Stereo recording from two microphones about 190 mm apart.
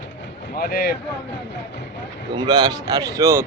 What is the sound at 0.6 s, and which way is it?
Speech, 50° left (ahead or behind).